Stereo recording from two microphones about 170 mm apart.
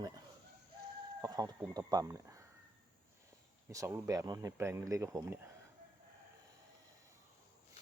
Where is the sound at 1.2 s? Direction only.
20° right (ahead or behind).